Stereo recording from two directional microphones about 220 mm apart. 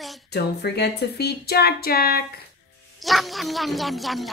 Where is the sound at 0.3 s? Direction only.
50° left (ahead or behind).